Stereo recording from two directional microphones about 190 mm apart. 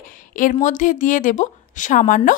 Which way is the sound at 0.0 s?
45° left (ahead or behind).